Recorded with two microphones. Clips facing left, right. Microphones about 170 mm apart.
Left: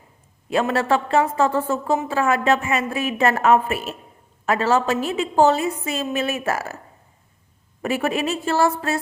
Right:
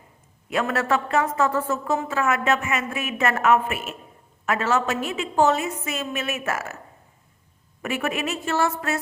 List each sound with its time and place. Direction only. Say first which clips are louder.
0.5 s a woman's voice: left 3 dB; 30° left (ahead or behind)
7.8 s a woman's voice: left 4 dB; 35° left (ahead or behind)